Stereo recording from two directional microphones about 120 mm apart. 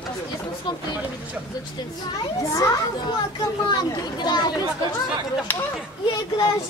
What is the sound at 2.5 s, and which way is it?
A child's voice, 30° left (ahead or behind).